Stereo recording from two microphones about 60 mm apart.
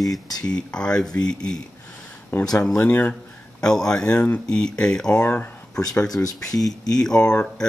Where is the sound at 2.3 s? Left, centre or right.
Left.